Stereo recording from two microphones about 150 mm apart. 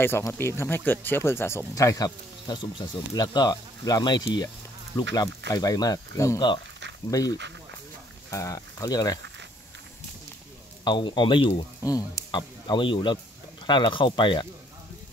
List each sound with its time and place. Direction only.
0.0 s speech: 15° left (ahead or behind)
10.8 s speech: 30° left (ahead or behind)